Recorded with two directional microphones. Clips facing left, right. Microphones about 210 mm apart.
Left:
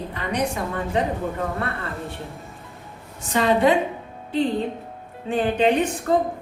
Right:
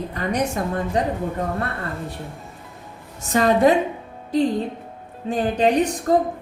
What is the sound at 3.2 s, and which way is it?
Speech, 45° right (ahead or behind).